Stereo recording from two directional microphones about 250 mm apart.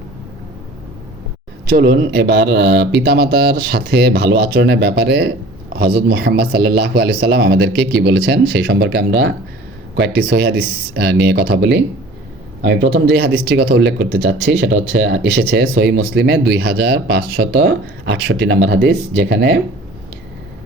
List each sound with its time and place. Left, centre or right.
1.7 s speech: right